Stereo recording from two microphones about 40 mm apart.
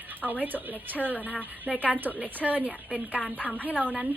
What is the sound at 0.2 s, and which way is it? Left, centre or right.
A woman's voice, right.